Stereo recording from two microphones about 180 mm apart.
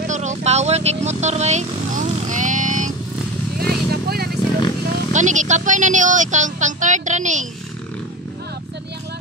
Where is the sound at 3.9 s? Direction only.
60° right (ahead or behind).